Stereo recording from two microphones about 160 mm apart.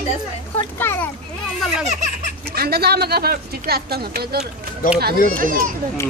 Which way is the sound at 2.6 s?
80° right.